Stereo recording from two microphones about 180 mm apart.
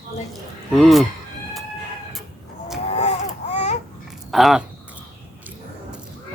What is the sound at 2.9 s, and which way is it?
Baby cry, 35° left (ahead or behind).